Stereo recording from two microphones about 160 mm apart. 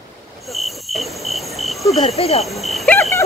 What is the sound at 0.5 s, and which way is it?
Cricket, centre (ahead or behind).